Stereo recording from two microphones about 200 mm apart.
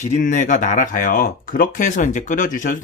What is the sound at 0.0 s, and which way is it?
Speech, 35° left (ahead or behind).